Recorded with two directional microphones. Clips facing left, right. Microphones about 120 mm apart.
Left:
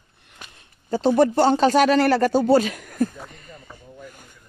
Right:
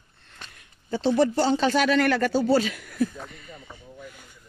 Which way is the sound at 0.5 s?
40° left (ahead or behind).